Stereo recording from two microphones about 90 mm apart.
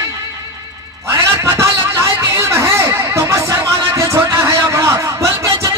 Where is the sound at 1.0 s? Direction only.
30° right (ahead or behind).